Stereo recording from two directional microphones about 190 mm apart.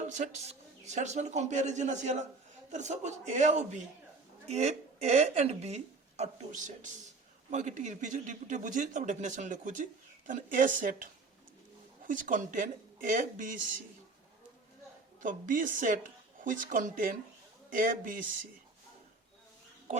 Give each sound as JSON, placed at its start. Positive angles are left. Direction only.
{"t": 0.1, "sound": "a woman's voice", "side_deg": -40}
{"t": 15.2, "sound": "speech", "side_deg": -45}